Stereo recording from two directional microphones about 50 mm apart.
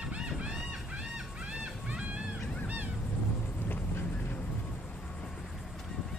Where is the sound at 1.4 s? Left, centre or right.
Right.